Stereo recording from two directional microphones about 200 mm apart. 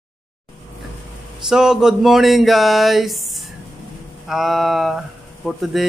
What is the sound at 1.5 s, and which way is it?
Speech, 5° right (ahead or behind).